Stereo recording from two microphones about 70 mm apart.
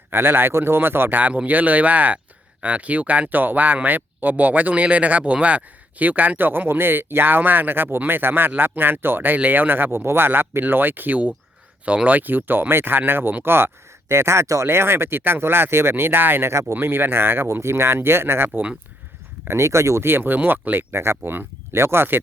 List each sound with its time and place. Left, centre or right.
0.1 s speech: right